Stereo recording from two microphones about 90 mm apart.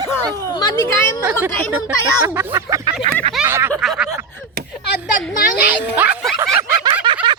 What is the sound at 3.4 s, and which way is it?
Snicker, 25° right (ahead or behind).